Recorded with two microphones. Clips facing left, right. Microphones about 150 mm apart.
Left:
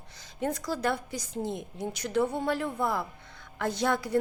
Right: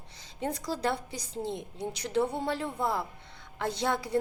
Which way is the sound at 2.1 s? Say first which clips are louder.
Left 2 dB; 25° right (ahead or behind).